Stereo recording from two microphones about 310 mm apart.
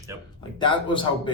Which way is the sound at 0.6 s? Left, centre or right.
Centre.